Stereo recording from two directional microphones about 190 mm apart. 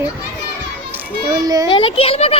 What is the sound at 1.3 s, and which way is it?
Speech, 20° right (ahead or behind).